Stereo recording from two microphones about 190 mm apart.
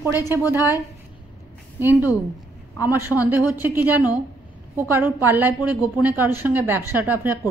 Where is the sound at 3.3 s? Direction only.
10° right (ahead or behind).